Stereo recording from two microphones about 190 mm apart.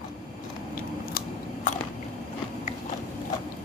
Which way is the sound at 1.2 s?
40° left (ahead or behind).